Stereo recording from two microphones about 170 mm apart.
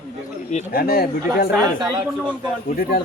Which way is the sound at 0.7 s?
65° left (ahead or behind).